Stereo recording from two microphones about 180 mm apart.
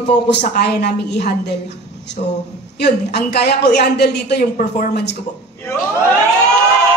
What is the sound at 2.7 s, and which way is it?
A woman's voice, 65° left (ahead or behind).